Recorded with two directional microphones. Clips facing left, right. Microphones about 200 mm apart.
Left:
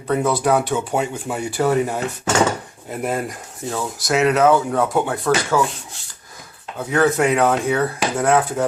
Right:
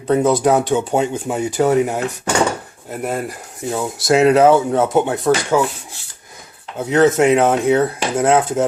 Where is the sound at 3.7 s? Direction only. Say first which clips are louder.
Right 5 dB; 25° right (ahead or behind).